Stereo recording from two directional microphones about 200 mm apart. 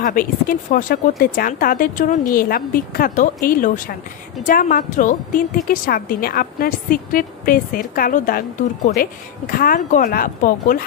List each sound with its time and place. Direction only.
0.0 s a woman's voice: 45° left (ahead or behind)